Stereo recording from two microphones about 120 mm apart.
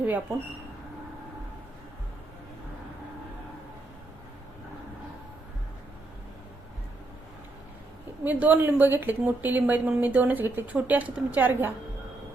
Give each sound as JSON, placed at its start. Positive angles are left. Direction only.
{"t": 0.0, "sound": "a woman's voice", "side_deg": -15}
{"t": 8.2, "sound": "a woman's voice", "side_deg": -15}